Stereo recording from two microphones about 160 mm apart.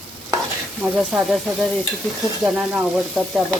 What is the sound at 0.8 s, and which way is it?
Stir, centre (ahead or behind).